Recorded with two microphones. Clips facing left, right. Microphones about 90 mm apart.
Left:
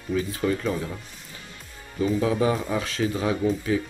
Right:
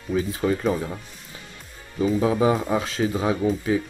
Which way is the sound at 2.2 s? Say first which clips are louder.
Right 4 dB; 20° right (ahead or behind).